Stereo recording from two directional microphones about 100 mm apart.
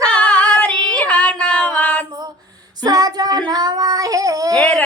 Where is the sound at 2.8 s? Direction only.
40° right (ahead or behind).